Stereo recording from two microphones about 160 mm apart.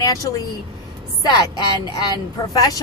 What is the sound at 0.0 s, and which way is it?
Speech, 20° left (ahead or behind).